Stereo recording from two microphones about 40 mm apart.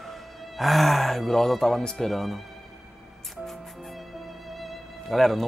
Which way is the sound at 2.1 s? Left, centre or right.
Centre.